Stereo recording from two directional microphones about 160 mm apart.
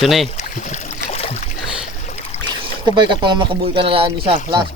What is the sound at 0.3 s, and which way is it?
Boat, 50° left (ahead or behind).